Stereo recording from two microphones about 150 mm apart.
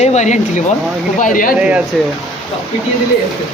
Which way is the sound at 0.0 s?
50° left (ahead or behind).